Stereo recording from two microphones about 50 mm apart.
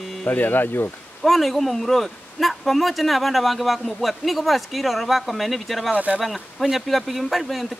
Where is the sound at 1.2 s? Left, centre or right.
Centre.